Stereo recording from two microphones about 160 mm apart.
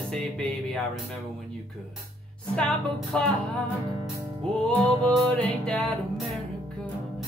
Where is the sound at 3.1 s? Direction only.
5° left (ahead or behind).